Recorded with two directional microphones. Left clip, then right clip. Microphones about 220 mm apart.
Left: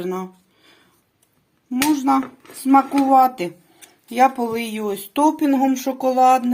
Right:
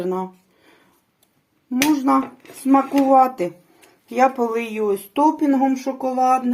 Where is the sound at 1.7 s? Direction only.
20° left (ahead or behind).